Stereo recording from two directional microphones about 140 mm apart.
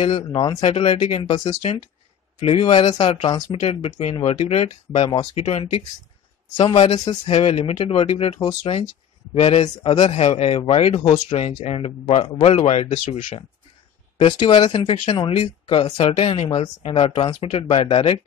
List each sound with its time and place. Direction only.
0.0 s speech: 40° left (ahead or behind)
0.6 s speech: 45° left (ahead or behind)
1.5 s speech: 45° left (ahead or behind)
3.6 s speech: 45° left (ahead or behind)
7.2 s speech: 45° left (ahead or behind)
14.2 s speech: 35° left (ahead or behind)